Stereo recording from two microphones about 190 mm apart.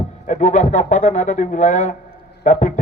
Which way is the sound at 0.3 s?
40° left (ahead or behind).